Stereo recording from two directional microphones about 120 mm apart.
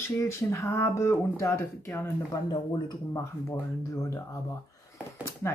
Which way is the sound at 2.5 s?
35° left (ahead or behind).